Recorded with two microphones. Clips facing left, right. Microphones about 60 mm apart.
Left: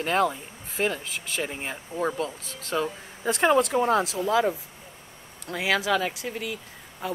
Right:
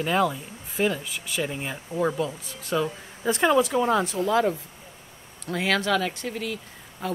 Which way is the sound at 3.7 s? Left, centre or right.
Left.